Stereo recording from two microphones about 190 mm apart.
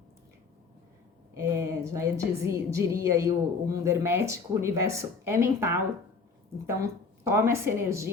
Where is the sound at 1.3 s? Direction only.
15° right (ahead or behind).